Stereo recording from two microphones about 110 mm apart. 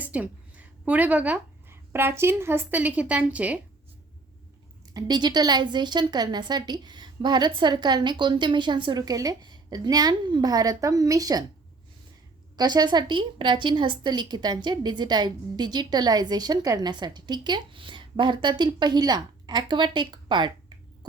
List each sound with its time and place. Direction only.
0.0 s speech: 15° right (ahead or behind)
4.9 s a woman's voice: 40° right (ahead or behind)
12.5 s a woman's voice: 40° right (ahead or behind)